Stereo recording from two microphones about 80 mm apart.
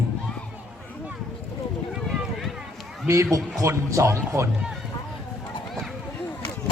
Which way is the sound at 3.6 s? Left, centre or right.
Right.